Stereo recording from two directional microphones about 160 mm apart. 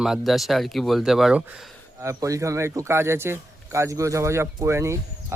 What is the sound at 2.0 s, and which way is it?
Speech, 20° right (ahead or behind).